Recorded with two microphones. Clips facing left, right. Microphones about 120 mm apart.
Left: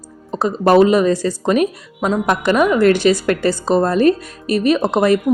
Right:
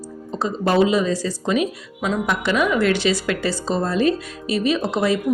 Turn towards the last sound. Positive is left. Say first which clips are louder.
# left 6 dB
turn(degrees=55)  # may be behind; listen again after turning